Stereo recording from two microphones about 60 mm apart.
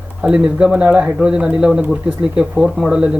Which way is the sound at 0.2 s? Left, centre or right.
Centre.